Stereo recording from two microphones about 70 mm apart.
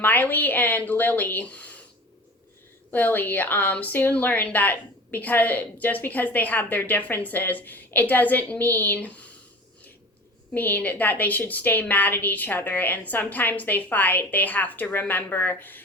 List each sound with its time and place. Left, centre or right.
0.0 s a woman's voice: left
2.9 s a woman's voice: left
10.5 s a woman's voice: left